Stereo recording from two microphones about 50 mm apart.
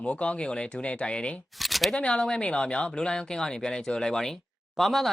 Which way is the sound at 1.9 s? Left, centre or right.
Left.